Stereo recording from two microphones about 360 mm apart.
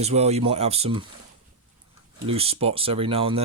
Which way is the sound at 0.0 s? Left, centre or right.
Centre.